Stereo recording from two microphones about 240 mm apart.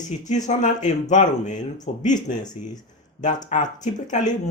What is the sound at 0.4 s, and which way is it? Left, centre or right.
Speech, left.